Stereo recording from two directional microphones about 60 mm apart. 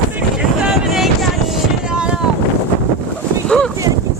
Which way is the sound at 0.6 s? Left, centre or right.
Centre.